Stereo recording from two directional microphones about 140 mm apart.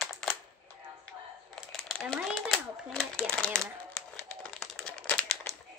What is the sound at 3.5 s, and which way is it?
Crumpling, 5° left (ahead or behind).